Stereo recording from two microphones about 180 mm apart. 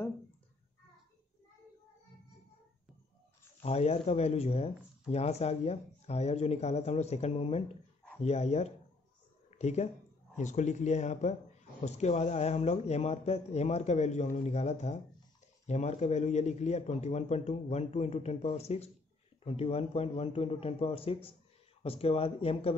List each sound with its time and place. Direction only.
3.6 s speech: 35° left (ahead or behind)